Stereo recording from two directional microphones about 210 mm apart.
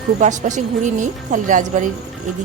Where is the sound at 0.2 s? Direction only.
35° right (ahead or behind).